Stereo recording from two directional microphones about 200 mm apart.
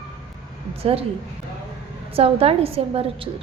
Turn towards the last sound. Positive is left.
turn(degrees=-30)  # may be behind; listen again after turning